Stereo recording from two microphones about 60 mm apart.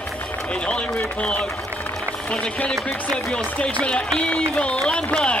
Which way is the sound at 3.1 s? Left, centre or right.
Centre.